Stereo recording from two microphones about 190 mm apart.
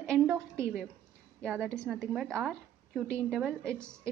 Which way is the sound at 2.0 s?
5° right (ahead or behind).